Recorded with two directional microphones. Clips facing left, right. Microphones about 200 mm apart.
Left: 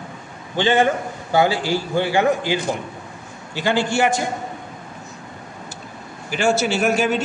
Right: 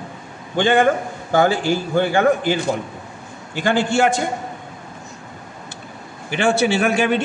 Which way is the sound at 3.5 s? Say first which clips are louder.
Right 1 dB; 50° right (ahead or behind).